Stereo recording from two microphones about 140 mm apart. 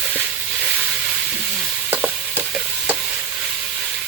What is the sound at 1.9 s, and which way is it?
Stir, 10° right (ahead or behind).